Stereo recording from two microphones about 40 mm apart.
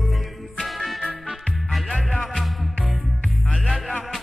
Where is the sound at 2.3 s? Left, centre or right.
Centre.